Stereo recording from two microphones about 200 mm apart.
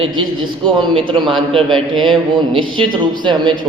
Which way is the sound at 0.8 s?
25° right (ahead or behind).